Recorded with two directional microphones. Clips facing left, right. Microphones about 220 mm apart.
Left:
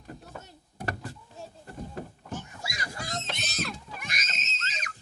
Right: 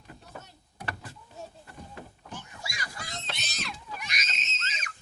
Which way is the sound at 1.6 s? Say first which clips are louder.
Left 6 dB; 45° left (ahead or behind).